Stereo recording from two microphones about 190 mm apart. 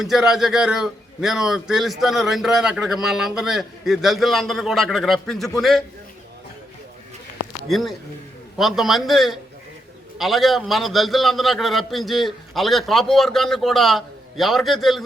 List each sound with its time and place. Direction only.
0.0 s a man's voice: centre (ahead or behind)
7.7 s a man's voice: centre (ahead or behind)